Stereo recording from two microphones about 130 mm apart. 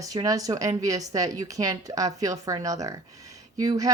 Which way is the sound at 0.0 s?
30° right (ahead or behind).